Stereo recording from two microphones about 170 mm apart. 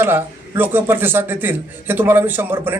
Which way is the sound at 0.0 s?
15° right (ahead or behind).